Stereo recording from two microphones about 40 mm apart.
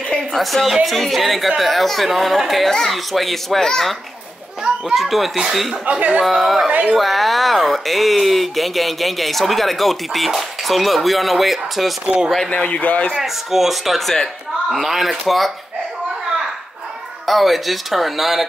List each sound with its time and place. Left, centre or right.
0.4 s speech: centre
4.9 s speech: centre
5.9 s speech: right
6.2 s speech: centre
6.7 s speech: right
7.0 s speech: centre
12.5 s a man's voice: left
13.2 s speech: centre
17.3 s speech: centre